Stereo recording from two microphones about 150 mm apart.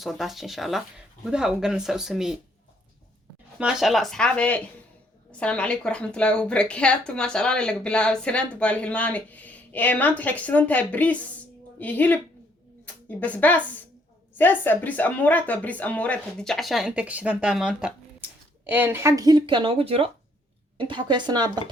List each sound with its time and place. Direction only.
0.0 s speech: centre (ahead or behind)
3.6 s a woman's voice: 5° right (ahead or behind); by 21.6 s 30° right (ahead or behind)